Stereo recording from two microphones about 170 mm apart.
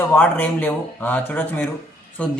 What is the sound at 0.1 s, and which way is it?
Speech, 10° left (ahead or behind).